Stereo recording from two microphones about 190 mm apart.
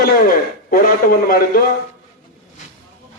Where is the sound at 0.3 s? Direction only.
50° left (ahead or behind).